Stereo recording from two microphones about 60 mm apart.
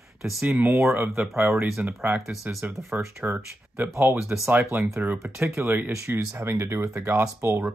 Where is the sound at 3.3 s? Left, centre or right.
Right.